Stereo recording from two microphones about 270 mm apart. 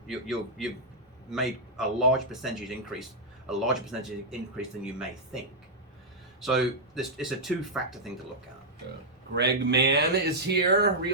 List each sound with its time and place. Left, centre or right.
0.1 s speech: centre
6.4 s speech: centre
9.3 s speech: right